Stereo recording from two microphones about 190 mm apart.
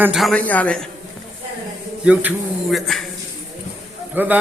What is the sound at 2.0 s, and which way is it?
A man's voice, 5° right (ahead or behind).